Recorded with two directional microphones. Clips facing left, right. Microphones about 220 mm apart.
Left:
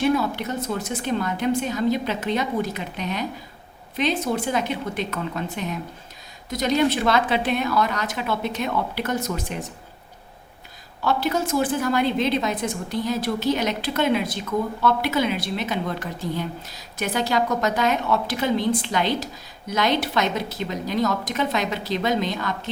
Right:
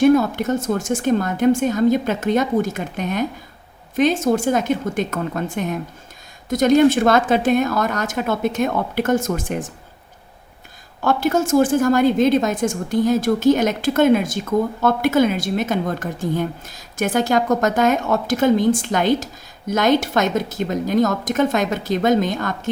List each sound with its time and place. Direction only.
0.0 s a woman's voice: 50° right (ahead or behind)
11.0 s a woman's voice: 50° right (ahead or behind)